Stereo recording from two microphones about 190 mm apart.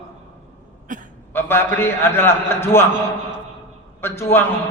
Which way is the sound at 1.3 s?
10° left (ahead or behind).